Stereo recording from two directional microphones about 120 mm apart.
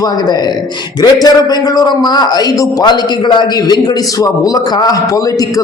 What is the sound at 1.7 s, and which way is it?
A man's voice, 35° left (ahead or behind).